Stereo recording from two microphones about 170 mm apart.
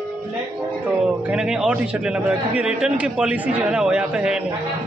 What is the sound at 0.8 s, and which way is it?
A man's voice, 5° right (ahead or behind).